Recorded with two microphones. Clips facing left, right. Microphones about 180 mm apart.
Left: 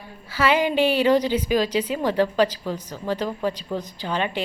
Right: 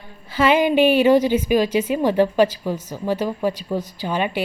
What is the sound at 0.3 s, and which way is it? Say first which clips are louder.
Speech: right 4 dB; 15° right (ahead or behind).